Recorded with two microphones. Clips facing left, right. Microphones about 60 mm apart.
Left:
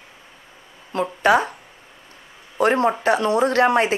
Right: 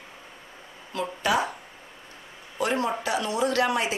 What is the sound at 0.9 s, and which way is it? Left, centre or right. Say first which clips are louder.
Speech: left 8 dB; left.